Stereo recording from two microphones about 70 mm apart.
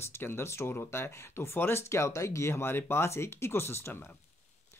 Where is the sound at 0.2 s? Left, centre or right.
Left.